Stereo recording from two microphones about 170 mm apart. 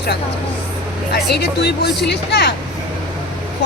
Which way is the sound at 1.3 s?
75° left (ahead or behind).